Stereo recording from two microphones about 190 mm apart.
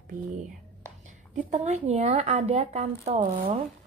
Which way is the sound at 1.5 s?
40° right (ahead or behind).